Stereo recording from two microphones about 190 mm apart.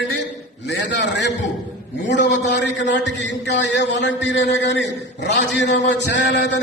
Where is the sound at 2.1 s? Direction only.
65° left (ahead or behind).